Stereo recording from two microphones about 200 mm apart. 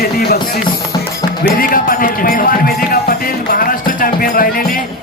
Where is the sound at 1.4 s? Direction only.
45° left (ahead or behind).